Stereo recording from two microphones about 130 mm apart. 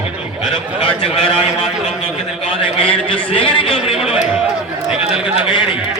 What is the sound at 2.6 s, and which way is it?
A man's voice, 45° left (ahead or behind).